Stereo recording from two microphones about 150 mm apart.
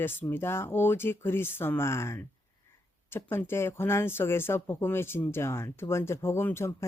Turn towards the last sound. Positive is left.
turn(degrees=15)  # may be behind; listen again after turning